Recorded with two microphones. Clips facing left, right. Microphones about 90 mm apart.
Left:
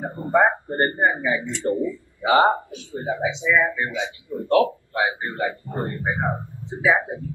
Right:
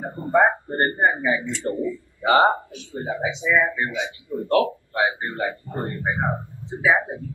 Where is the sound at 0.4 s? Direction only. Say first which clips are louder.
Even; 15° right (ahead or behind).